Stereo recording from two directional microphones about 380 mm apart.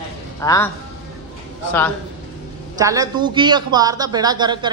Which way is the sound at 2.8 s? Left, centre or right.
Centre.